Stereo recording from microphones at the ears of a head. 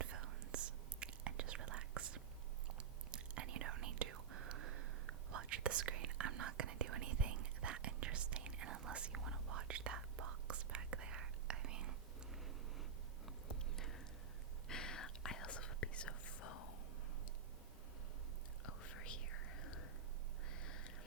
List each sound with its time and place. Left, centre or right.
0.0 s whispering: right
14.7 s whispering: left
18.6 s whispering: left
20.5 s a sound: left